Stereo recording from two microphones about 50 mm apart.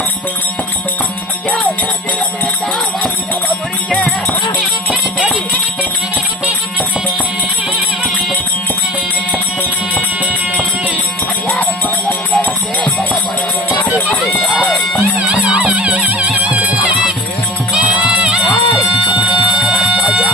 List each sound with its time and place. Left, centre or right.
3.8 s music: centre
11.6 s music: left
14.3 s music: centre
15.2 s music: right
18.3 s music: centre
18.9 s music: right